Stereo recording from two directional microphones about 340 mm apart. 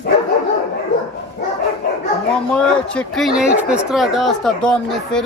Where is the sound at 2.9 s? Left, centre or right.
Centre.